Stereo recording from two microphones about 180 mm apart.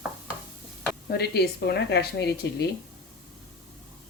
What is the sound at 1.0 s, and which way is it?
A woman's voice, 60° left (ahead or behind).